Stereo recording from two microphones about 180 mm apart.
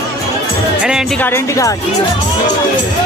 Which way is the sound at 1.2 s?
15° left (ahead or behind).